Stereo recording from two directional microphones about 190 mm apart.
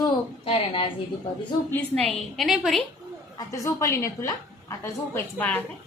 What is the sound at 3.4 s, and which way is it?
A woman's voice, 15° left (ahead or behind).